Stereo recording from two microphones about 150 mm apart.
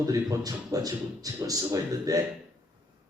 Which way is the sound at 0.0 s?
20° right (ahead or behind).